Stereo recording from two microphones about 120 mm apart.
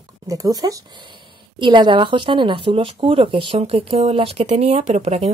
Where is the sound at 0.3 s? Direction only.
30° right (ahead or behind).